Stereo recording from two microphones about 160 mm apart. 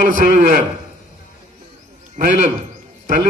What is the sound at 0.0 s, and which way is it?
Speech, 55° right (ahead or behind).